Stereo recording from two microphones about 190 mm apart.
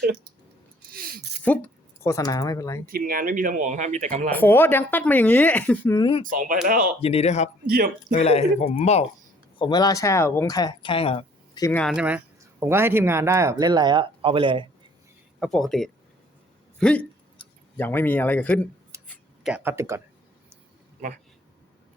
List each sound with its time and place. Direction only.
0.9 s a sound: 50° right (ahead or behind)
1.5 s speech: 10° left (ahead or behind)
2.8 s speech: 50° right (ahead or behind)
4.3 s speech: 10° left (ahead or behind)
6.0 s speech: 25° left (ahead or behind)
6.2 s speech: 45° right (ahead or behind)
7.0 s speech: 35° left (ahead or behind)
9.6 s speech: 20° left (ahead or behind)
11.6 s speech: 5° left (ahead or behind)
11.9 s speech: 5° right (ahead or behind); by 14.7 s 25° right (ahead or behind)
15.4 s speech: centre (ahead or behind)
17.4 s tick-tock: 25° left (ahead or behind)
17.7 s speech: 10° left (ahead or behind)
19.0 s a sound: centre (ahead or behind)